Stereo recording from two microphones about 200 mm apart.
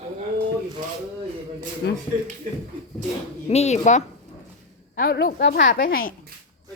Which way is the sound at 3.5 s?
35° left (ahead or behind).